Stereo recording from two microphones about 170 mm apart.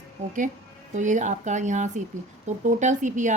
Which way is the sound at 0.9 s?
45° right (ahead or behind).